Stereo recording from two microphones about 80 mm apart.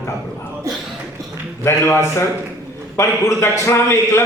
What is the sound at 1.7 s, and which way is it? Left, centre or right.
A man's voice, left.